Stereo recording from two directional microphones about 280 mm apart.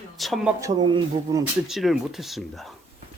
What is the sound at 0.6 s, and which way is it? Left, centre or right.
Speech, centre.